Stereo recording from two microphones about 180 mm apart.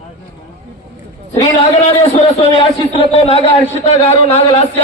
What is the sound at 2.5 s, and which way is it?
A man's voice, 35° left (ahead or behind).